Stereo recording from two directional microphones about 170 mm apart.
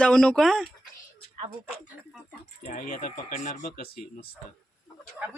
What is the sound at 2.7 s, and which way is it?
Speech, 55° left (ahead or behind).